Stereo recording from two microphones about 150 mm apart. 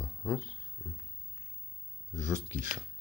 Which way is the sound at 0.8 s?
10° right (ahead or behind).